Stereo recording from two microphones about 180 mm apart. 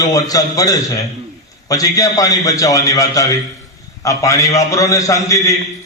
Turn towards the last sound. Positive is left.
turn(degrees=15)  # may be behind; listen again after turning